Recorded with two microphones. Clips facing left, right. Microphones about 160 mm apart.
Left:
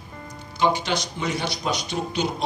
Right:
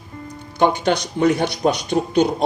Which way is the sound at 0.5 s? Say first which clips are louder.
Right 5 dB; 55° right (ahead or behind).